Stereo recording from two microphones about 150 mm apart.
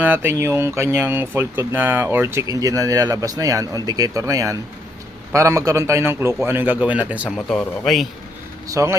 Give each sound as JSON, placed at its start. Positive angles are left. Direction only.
{"t": 0.0, "sound": "speech", "side_deg": -15}
{"t": 7.3, "sound": "speech", "side_deg": 0}
{"t": 8.6, "sound": "a man's voice", "side_deg": -20}